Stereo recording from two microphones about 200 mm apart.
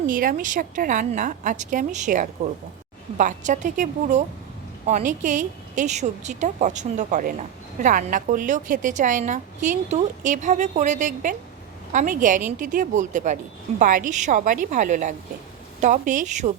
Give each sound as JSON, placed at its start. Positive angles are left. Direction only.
{"t": 0.1, "sound": "a woman's voice", "side_deg": -45}